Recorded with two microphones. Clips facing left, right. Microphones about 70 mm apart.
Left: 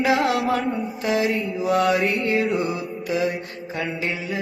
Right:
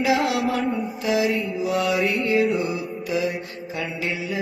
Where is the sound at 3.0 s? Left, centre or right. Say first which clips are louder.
Left 2 dB; left.